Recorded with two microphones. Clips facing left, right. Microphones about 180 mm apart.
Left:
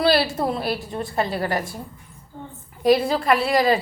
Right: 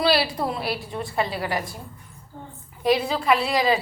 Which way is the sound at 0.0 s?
50° left (ahead or behind).